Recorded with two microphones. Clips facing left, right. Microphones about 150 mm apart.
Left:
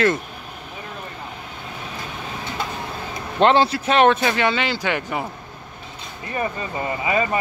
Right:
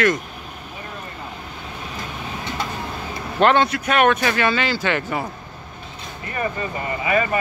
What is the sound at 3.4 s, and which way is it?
Speech, 25° left (ahead or behind).